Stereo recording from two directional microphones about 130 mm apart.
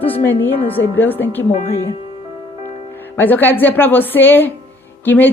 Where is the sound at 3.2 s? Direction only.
15° left (ahead or behind).